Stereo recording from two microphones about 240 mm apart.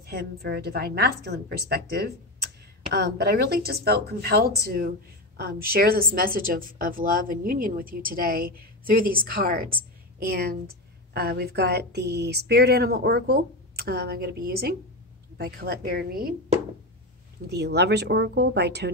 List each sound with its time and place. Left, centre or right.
0.0 s a woman's voice: right